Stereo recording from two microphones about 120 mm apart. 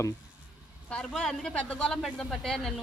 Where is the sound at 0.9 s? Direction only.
5° left (ahead or behind).